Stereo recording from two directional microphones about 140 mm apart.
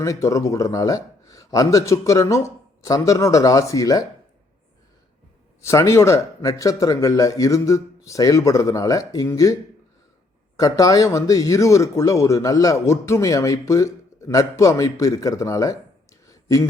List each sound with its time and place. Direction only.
0.0 s speech: 20° left (ahead or behind)
5.6 s speech: 20° left (ahead or behind)
10.6 s speech: 25° left (ahead or behind)
16.2 s a sound: 25° left (ahead or behind)